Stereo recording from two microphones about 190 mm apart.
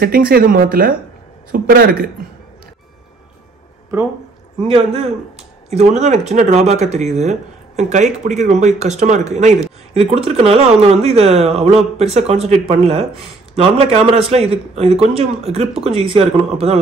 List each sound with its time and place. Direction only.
0.0 s speech: 50° right (ahead or behind)
4.6 s speech: 25° right (ahead or behind)